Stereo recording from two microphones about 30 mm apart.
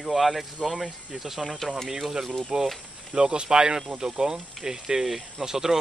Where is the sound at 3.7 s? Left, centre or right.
Centre.